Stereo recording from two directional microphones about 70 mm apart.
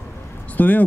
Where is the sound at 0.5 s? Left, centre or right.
Left.